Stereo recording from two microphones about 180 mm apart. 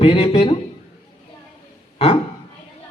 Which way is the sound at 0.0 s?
30° left (ahead or behind).